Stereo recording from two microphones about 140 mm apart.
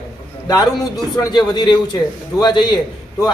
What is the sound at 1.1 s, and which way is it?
A man's voice, 30° left (ahead or behind).